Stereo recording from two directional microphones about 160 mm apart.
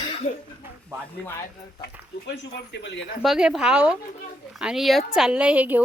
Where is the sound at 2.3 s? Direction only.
90° left.